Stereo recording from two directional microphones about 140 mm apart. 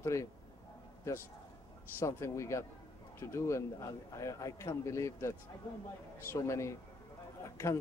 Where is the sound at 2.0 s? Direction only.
20° left (ahead or behind).